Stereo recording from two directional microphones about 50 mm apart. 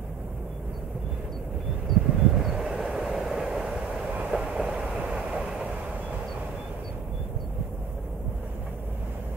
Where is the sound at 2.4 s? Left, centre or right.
Centre.